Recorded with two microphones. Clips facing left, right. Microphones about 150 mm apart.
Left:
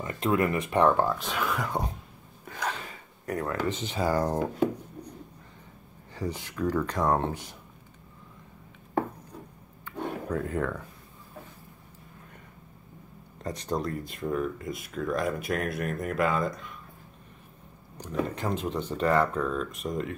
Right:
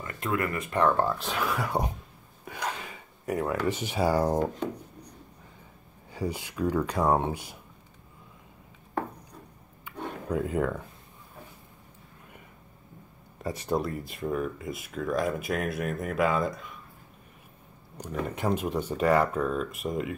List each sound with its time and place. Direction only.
0.0 s speech: 25° left (ahead or behind)
1.0 s speech: centre (ahead or behind)
2.4 s gasp: 10° right (ahead or behind)
3.3 s speech: 15° right (ahead or behind)
6.1 s speech: 10° right (ahead or behind)
9.8 s a sound: 15° right (ahead or behind)
13.4 s speech: 10° right (ahead or behind)
18.3 s speech: 15° right (ahead or behind)